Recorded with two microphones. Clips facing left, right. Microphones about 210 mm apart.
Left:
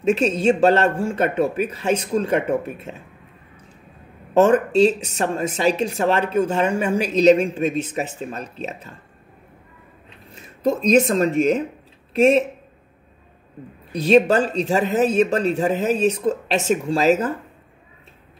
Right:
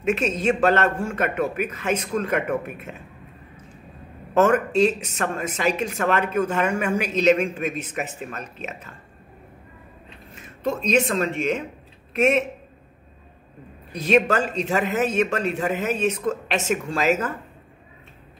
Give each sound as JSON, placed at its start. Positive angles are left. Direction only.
{"t": 0.0, "sound": "speech", "side_deg": 30}
{"t": 4.3, "sound": "speech", "side_deg": 30}
{"t": 10.3, "sound": "speech", "side_deg": 35}
{"t": 13.9, "sound": "speech", "side_deg": 30}